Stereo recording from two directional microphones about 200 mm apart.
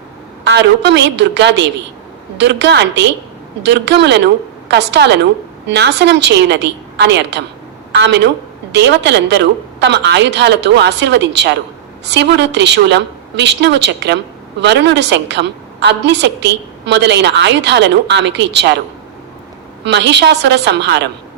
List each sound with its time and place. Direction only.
0.4 s a woman's voice: 60° right (ahead or behind)
19.8 s a woman's voice: 60° right (ahead or behind)